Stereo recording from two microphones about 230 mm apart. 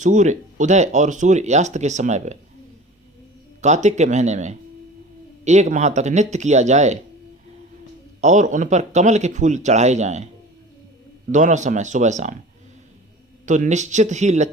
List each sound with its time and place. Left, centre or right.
0.0 s speech: right
3.6 s speech: right
8.2 s speech: right
11.3 s speech: right
13.4 s speech: right